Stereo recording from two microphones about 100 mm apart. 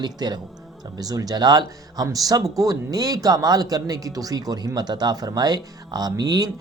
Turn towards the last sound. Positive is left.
turn(degrees=-40)  # may be behind; listen again after turning